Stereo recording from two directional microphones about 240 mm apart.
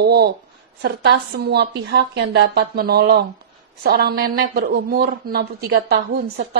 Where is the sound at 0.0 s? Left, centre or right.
Right.